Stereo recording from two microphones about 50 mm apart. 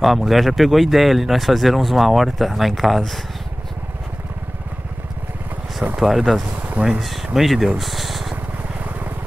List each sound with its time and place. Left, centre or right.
0.0 s speech: centre
5.9 s speech: centre
6.8 s speech: right
7.2 s speech: centre